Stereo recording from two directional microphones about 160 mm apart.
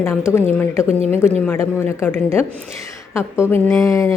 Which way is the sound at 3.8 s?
20° left (ahead or behind).